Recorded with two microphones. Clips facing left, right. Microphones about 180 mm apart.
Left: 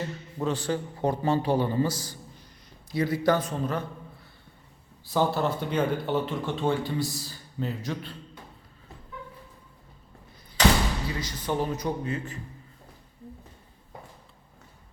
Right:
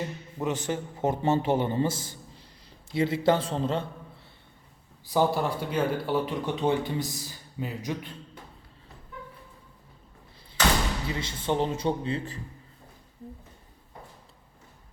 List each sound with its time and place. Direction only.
0.0 s a man's voice: 15° right (ahead or behind)
5.0 s speech: 15° right (ahead or behind)
11.1 s speech: 25° right (ahead or behind)